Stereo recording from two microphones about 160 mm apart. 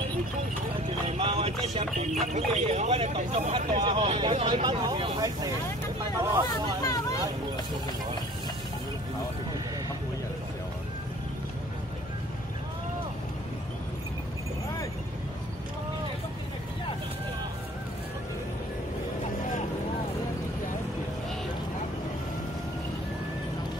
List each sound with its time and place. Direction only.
1.0 s music: 35° right (ahead or behind)
2.0 s speech: 45° right (ahead or behind)
3.8 s speech: 35° right (ahead or behind)
6.4 s speech: 25° left (ahead or behind)